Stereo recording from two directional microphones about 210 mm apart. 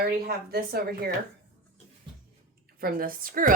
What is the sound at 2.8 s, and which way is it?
Speech, 45° right (ahead or behind).